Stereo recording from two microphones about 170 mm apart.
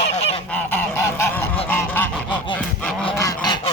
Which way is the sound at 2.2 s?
25° left (ahead or behind).